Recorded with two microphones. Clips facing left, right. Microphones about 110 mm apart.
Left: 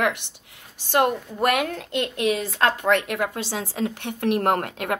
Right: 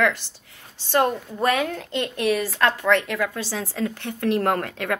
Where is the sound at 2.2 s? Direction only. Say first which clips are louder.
Right 1 dB; 20° left (ahead or behind).